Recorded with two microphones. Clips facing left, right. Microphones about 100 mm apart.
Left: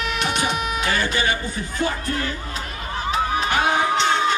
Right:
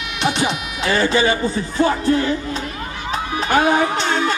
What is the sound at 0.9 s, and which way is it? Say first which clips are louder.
Music: right 9 dB; 25° right (ahead or behind).